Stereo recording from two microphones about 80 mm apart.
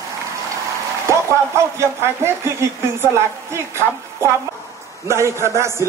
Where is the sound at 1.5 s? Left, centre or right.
Right.